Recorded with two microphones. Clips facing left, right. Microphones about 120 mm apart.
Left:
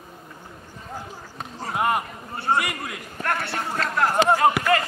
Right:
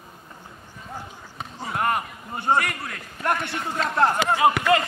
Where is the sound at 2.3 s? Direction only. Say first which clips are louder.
Right 1 dB; 15° right (ahead or behind).